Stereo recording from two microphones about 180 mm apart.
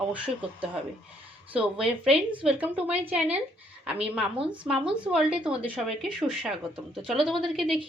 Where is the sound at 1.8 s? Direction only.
5° right (ahead or behind).